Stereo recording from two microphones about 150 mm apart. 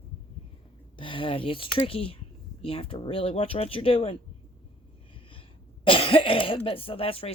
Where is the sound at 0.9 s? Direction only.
35° left (ahead or behind).